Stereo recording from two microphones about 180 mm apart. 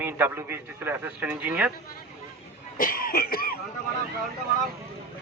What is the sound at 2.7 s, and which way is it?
Cough, 50° left (ahead or behind).